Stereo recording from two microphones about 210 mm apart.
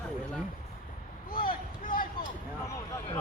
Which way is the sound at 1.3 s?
45° left (ahead or behind).